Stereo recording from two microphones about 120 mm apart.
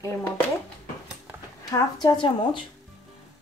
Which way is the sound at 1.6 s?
30° left (ahead or behind).